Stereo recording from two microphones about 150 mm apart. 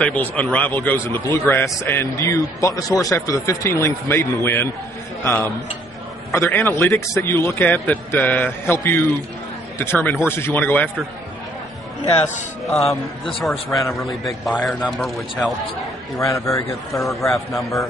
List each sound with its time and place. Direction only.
0.0 s a man's voice: 10° left (ahead or behind)
12.7 s a man's voice: centre (ahead or behind)
16.2 s a man's voice: 20° left (ahead or behind)
17.0 s a man's voice: centre (ahead or behind)